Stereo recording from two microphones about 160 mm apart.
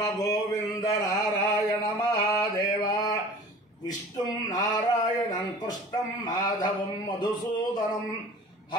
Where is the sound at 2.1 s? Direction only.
20° left (ahead or behind).